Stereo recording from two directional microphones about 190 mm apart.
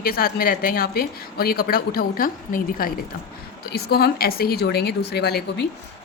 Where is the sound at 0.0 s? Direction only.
50° left (ahead or behind).